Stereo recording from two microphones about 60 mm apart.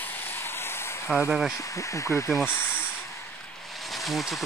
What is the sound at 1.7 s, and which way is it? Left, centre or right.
Speech, left.